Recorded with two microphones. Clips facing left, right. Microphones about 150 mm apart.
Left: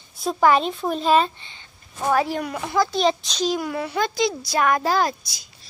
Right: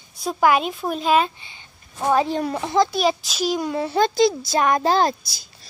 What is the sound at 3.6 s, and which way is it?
A child's voice, 25° right (ahead or behind).